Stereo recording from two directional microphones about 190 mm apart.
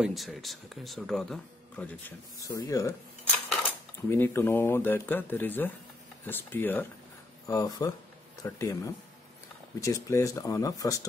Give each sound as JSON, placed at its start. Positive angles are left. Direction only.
{"t": 0.0, "sound": "speech", "side_deg": 0}
{"t": 4.1, "sound": "speech", "side_deg": 10}